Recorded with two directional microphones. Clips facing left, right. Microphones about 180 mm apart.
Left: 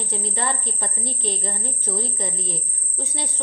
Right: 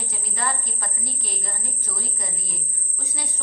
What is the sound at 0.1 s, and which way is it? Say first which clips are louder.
A woman's voice: left 3 dB; 30° left (ahead or behind).